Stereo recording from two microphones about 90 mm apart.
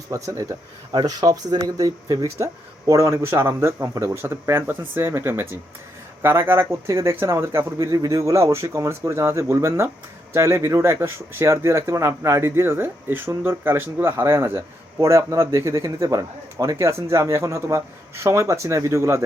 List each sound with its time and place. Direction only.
0.1 s speech: 40° right (ahead or behind)
0.9 s speech: 50° right (ahead or behind); by 19.2 s 30° right (ahead or behind)